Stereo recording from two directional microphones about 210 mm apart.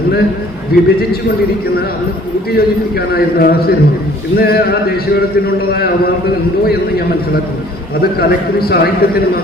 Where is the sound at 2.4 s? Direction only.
50° left (ahead or behind).